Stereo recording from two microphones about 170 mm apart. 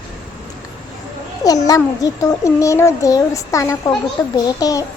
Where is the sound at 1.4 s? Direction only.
20° left (ahead or behind).